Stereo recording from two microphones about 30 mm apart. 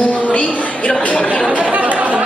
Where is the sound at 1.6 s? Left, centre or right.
Right.